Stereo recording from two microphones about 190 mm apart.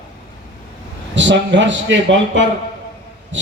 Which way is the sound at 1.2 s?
70° right (ahead or behind).